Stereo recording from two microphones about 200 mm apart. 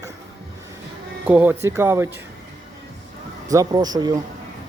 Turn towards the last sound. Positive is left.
turn(degrees=-20)  # may be behind; listen again after turning